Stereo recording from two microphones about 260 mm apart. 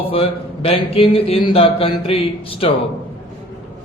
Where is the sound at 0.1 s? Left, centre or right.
Left.